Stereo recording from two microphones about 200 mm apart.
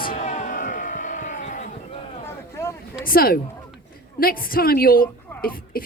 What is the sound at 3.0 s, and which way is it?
Speech, 45° left (ahead or behind).